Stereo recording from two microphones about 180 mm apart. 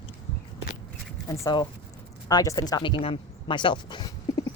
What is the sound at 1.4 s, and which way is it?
Speech, 20° left (ahead or behind).